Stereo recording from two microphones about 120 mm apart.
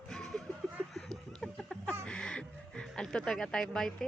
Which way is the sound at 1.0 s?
5° left (ahead or behind).